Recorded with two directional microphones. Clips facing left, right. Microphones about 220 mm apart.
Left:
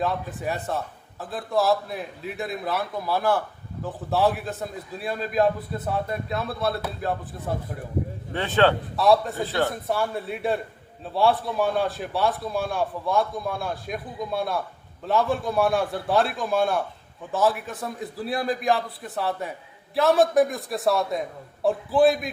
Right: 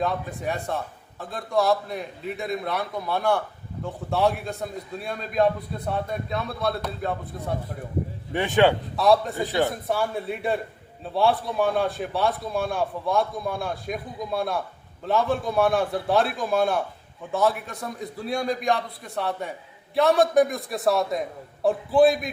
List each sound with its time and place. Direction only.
0.0 s a man's voice: centre (ahead or behind)
8.3 s speech: 15° right (ahead or behind)
9.0 s a man's voice: centre (ahead or behind)
9.4 s speech: 15° right (ahead or behind)
9.6 s a man's voice: centre (ahead or behind)